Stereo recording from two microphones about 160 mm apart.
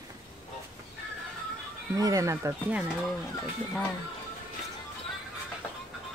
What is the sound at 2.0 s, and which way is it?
Speech, 20° right (ahead or behind).